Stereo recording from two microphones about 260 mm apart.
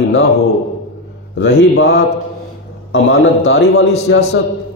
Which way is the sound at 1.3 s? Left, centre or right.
Left.